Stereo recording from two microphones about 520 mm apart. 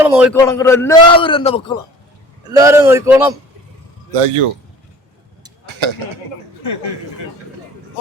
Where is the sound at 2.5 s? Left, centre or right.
Centre.